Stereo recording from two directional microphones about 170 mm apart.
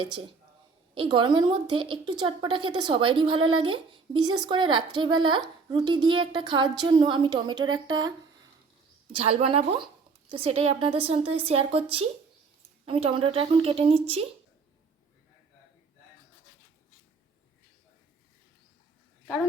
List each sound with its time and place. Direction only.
0.9 s a woman's voice: 25° right (ahead or behind)
9.2 s a woman's voice: 35° right (ahead or behind)